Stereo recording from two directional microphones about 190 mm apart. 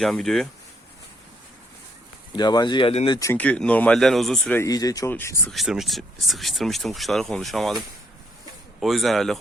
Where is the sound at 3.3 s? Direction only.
5° left (ahead or behind).